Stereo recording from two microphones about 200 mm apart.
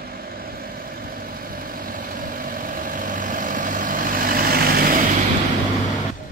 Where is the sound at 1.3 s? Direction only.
45° right (ahead or behind).